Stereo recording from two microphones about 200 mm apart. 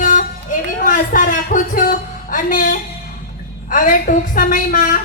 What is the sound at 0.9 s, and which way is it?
A woman's voice, 40° left (ahead or behind).